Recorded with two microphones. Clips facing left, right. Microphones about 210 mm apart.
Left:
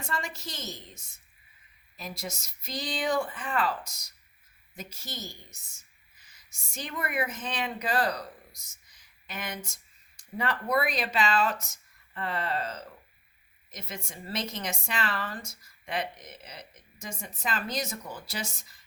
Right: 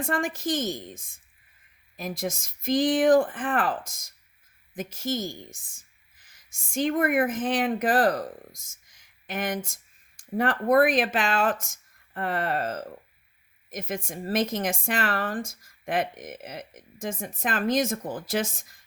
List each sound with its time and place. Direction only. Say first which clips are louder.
0.0 s a woman's voice: right 9 dB; 50° right (ahead or behind)